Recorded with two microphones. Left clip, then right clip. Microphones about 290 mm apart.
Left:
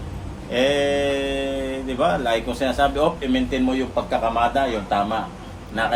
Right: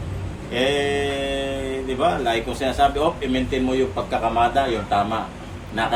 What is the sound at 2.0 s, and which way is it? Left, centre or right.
A man's voice, centre.